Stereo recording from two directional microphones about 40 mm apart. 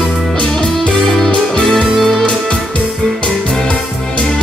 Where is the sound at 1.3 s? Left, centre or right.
Left.